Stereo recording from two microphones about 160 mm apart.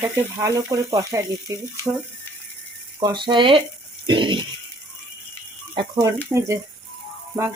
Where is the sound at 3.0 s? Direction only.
30° right (ahead or behind).